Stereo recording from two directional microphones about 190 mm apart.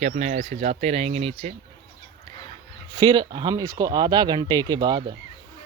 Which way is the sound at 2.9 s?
20° right (ahead or behind).